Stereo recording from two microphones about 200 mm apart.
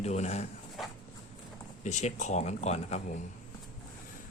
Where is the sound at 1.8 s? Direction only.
35° left (ahead or behind).